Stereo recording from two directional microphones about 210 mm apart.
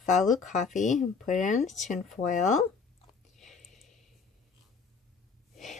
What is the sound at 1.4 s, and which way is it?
A woman's voice, 35° left (ahead or behind).